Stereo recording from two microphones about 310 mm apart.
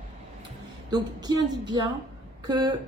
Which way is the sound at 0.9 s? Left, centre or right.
Centre.